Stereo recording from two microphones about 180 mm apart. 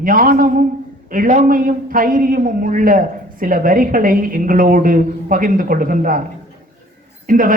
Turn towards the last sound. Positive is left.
turn(degrees=-50)  # may be behind; listen again after turning